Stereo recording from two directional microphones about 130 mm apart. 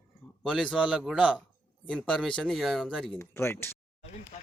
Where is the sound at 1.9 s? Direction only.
5° left (ahead or behind).